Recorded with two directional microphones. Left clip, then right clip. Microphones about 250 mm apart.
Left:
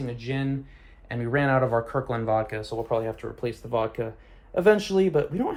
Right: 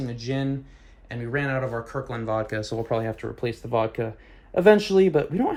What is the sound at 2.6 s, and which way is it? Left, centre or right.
Speech, right.